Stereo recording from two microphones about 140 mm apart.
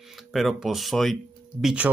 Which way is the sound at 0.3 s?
Centre (ahead or behind).